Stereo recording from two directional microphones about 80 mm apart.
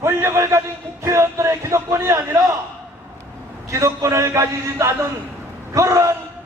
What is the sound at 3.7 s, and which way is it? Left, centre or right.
Music, right.